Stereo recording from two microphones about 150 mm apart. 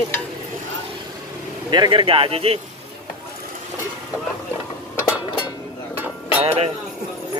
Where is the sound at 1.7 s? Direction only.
30° right (ahead or behind).